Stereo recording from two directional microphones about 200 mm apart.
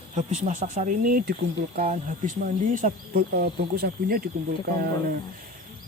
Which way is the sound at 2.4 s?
40° right (ahead or behind).